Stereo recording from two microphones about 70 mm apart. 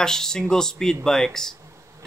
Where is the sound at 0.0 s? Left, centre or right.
Centre.